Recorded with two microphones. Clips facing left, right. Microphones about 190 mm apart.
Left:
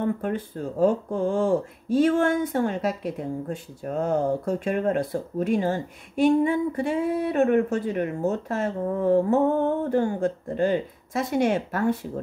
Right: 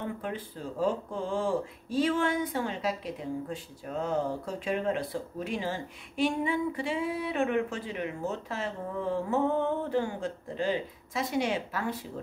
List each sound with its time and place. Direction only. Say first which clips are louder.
0.0 s speech: left 9 dB; 50° left (ahead or behind)